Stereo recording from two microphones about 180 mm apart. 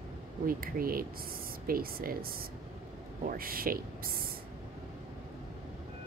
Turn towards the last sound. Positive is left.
turn(degrees=-55)  # may be behind; listen again after turning